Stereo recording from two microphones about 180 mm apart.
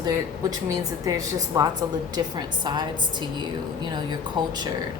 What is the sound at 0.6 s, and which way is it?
A woman's voice, 20° right (ahead or behind).